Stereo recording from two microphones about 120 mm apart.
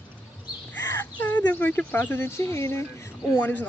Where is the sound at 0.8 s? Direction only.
20° left (ahead or behind).